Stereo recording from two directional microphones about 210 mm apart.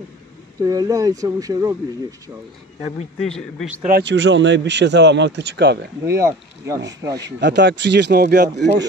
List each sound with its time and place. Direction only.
0.6 s speech: 15° right (ahead or behind)
3.2 s a man's voice: centre (ahead or behind)
3.8 s speech: 50° right (ahead or behind)
6.0 s speech: 15° right (ahead or behind)
7.3 s speech: 55° right (ahead or behind)